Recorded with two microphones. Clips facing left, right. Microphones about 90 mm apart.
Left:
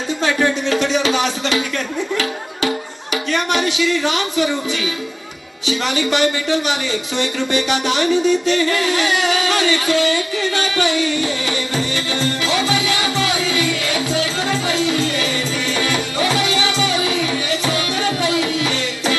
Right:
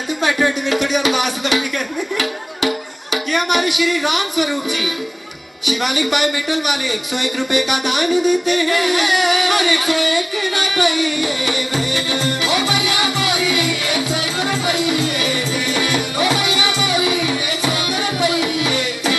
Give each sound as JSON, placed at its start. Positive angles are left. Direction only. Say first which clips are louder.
{"t": 0.2, "sound": "a man's voice", "louder": "even", "side_deg": -15}
{"t": 3.3, "sound": "a man's voice", "louder": "right 1 dB", "side_deg": -15}
{"t": 5.7, "sound": "a man's voice", "louder": "even", "side_deg": -15}
{"t": 12.6, "sound": "music", "louder": "even", "side_deg": -20}